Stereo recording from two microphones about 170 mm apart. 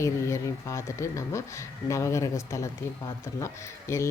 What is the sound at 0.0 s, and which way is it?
Speech, 15° left (ahead or behind).